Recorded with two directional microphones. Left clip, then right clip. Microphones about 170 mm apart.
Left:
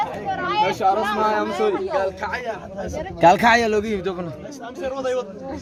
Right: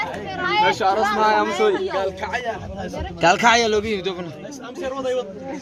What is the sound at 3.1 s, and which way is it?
A man's voice, 30° left (ahead or behind).